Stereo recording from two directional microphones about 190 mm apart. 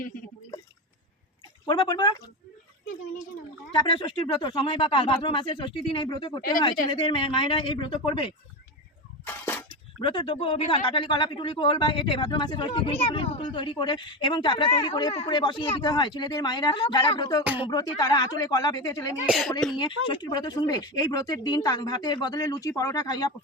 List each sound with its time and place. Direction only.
1.6 s speech: 25° left (ahead or behind)
3.7 s speech: 25° left (ahead or behind)
9.2 s a sound: 10° left (ahead or behind)
10.0 s speech: 25° left (ahead or behind)
19.2 s speech: centre (ahead or behind)
19.7 s speech: 25° left (ahead or behind)